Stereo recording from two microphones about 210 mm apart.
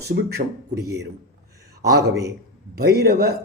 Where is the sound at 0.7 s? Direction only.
15° right (ahead or behind).